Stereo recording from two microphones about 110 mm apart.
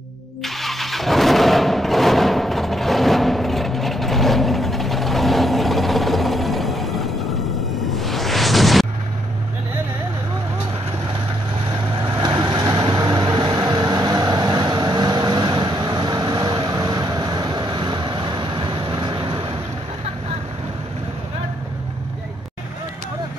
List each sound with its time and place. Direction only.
0.4 s vehicle: centre (ahead or behind)
7.9 s music: centre (ahead or behind)
11.7 s vehicle: 45° right (ahead or behind)